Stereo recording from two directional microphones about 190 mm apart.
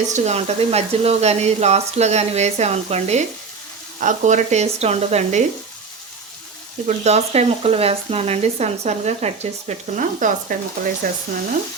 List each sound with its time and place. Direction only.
0.1 s speech: 35° right (ahead or behind)
6.8 s speech: 35° right (ahead or behind)